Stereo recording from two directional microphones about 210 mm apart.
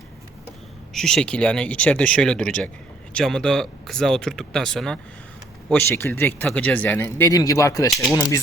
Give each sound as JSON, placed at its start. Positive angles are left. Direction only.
{"t": 0.9, "sound": "speech", "side_deg": 5}